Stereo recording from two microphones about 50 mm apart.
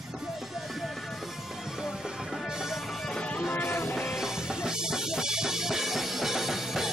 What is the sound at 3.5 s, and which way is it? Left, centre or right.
Music, left.